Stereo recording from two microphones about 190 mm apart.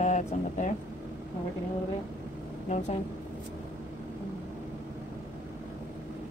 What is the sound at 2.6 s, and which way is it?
Speech, 35° left (ahead or behind).